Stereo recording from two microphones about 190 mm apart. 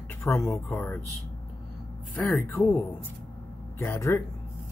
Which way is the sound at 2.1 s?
10° left (ahead or behind).